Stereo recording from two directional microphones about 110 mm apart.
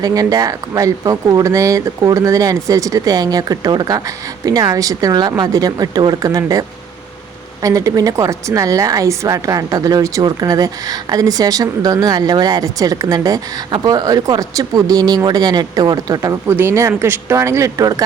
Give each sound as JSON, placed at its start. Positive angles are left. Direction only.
{"t": 0.0, "sound": "speech", "side_deg": -35}
{"t": 16.5, "sound": "speech", "side_deg": -20}